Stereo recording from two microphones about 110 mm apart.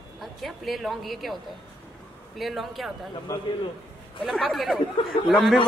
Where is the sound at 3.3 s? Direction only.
25° left (ahead or behind).